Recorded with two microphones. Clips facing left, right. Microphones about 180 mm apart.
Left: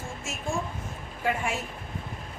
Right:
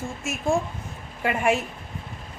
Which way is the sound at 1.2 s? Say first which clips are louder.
Right 6 dB; 70° right (ahead or behind).